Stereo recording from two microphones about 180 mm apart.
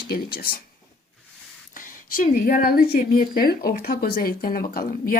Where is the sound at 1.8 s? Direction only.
50° left (ahead or behind).